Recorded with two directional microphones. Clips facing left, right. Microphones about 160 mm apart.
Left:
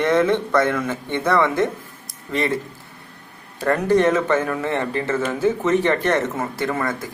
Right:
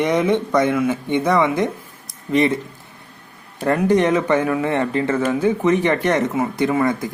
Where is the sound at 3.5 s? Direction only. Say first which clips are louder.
Right 1 dB; 15° right (ahead or behind).